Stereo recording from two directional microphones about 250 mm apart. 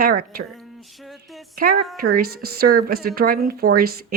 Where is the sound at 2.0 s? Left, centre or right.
Right.